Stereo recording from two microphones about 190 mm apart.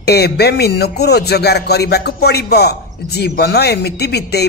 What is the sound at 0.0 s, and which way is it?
A man's voice, 60° left (ahead or behind).